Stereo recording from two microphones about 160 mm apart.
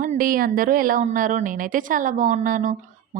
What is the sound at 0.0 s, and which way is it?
Speech, 60° right (ahead or behind).